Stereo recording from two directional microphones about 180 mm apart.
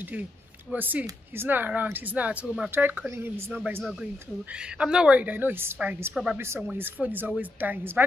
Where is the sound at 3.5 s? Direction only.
Centre (ahead or behind).